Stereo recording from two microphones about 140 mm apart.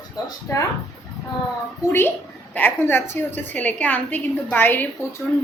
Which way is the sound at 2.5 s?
10° left (ahead or behind).